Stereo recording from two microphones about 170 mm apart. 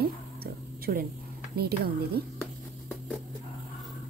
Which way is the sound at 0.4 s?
60° right (ahead or behind).